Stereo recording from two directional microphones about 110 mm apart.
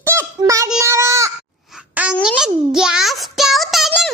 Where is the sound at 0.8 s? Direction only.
25° right (ahead or behind).